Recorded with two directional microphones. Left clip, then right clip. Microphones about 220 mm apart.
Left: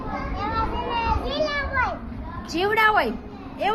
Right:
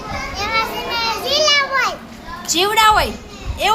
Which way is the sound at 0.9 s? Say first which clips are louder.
Right 6 dB; 30° right (ahead or behind).